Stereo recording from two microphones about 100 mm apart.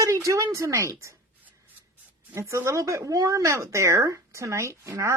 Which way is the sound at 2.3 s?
30° right (ahead or behind).